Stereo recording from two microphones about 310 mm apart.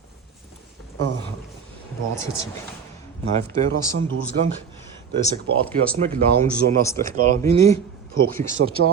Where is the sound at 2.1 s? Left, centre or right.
Centre.